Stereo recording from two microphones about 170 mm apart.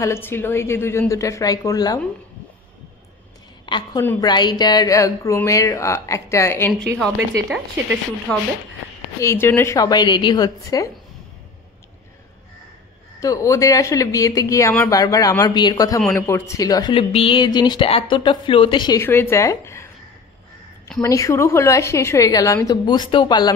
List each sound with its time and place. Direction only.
0.0 s speech: 15° left (ahead or behind)
3.6 s a woman's voice: 30° left (ahead or behind)
7.4 s speech: 5° right (ahead or behind)
8.3 s a woman's voice: 5° left (ahead or behind)
13.2 s a woman's voice: 20° left (ahead or behind)
19.0 s speech: 15° left (ahead or behind)
21.0 s a woman's voice: 20° left (ahead or behind)